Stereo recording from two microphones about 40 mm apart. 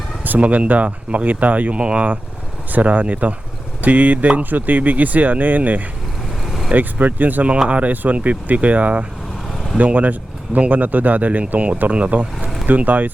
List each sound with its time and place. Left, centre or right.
0.3 s speech: right
1.8 s speech: right
2.7 s speech: right
6.4 s vehicle: centre
6.7 s speech: right
12.6 s speech: right